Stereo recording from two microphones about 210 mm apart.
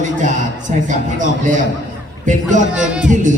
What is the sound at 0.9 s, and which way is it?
Music, 35° right (ahead or behind).